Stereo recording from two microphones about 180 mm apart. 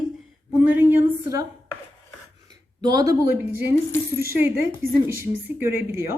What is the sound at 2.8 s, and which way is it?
A woman's voice, 20° right (ahead or behind).